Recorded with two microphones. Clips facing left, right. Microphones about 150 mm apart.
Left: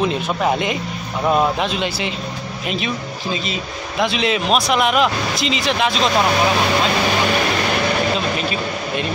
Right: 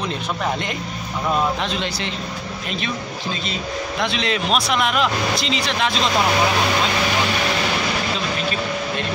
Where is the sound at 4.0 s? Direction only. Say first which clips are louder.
Left 5 dB; 5° left (ahead or behind).